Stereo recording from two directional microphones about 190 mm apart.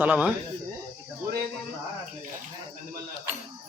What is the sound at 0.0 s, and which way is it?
Speech, 5° right (ahead or behind).